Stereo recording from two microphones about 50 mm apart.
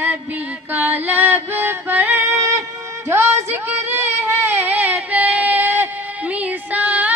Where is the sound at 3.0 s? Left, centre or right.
Right.